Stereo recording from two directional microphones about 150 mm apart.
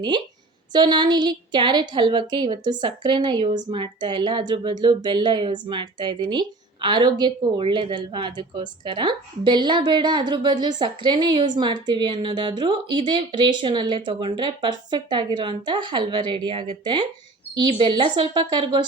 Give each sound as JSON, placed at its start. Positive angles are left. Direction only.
{"t": 0.7, "sound": "a woman's voice", "side_deg": -30}